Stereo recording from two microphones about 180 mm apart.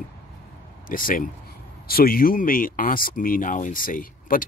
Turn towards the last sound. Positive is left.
turn(degrees=50)  # may be behind; listen again after turning